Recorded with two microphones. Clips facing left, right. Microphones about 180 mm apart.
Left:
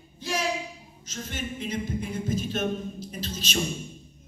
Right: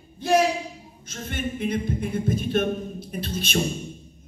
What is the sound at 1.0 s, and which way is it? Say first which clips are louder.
A capella: right 4 dB; 55° right (ahead or behind).